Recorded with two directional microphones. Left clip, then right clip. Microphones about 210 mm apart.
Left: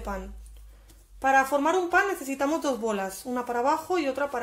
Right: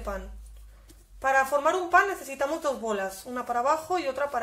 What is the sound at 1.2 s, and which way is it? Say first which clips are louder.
A woman's voice: left 1 dB; 25° left (ahead or behind).